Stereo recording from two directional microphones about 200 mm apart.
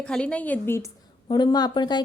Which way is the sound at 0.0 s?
5° left (ahead or behind).